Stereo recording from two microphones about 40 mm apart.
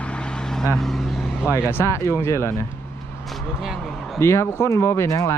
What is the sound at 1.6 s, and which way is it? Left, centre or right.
Speech, left.